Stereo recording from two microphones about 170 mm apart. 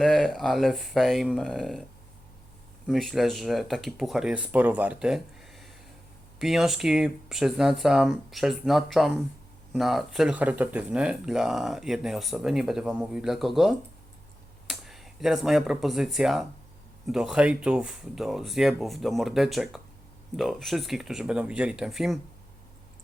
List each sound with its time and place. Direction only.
0.0 s speech: 5° left (ahead or behind)
2.8 s speech: centre (ahead or behind)